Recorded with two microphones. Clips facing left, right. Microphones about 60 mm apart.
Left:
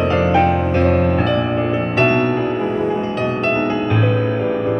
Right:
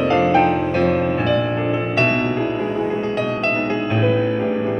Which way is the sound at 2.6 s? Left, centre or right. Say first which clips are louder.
Left 2 dB; left.